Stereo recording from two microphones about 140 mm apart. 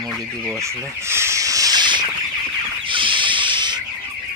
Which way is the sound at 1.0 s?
20° right (ahead or behind).